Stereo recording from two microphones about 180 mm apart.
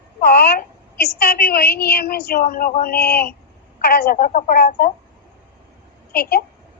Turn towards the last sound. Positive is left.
turn(degrees=60)  # may be behind; listen again after turning